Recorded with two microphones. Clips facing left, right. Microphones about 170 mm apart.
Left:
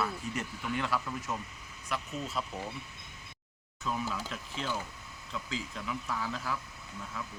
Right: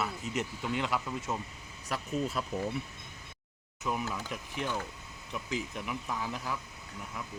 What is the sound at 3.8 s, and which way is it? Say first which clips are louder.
Speech: right 1 dB; 15° right (ahead or behind).